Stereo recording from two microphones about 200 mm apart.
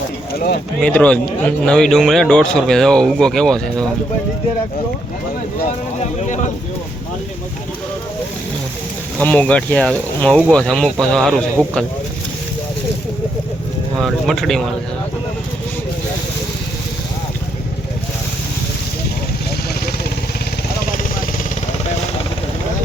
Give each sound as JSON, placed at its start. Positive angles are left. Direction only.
{"t": 0.3, "sound": "speech", "side_deg": 50}
{"t": 0.8, "sound": "a man's voice", "side_deg": 5}
{"t": 6.0, "sound": "speech", "side_deg": 35}
{"t": 9.1, "sound": "a man's voice", "side_deg": 5}
{"t": 14.0, "sound": "a man's voice", "side_deg": 0}